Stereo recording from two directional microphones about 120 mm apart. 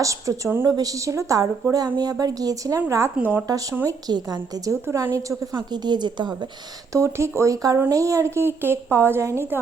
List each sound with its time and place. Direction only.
0.0 s speech: 25° right (ahead or behind)
3.2 s speech: 20° right (ahead or behind)
3.4 s a woman's voice: 30° right (ahead or behind)
6.9 s speech: 25° right (ahead or behind)